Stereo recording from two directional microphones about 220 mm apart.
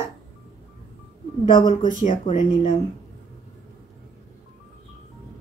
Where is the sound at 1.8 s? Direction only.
35° left (ahead or behind).